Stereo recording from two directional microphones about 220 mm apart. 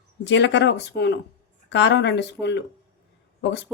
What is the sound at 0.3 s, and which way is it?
Speech, 55° left (ahead or behind).